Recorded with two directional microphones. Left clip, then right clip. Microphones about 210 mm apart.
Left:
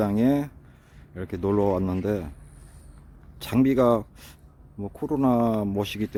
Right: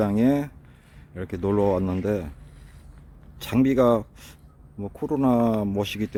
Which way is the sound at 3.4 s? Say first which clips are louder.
Right 1 dB; centre (ahead or behind).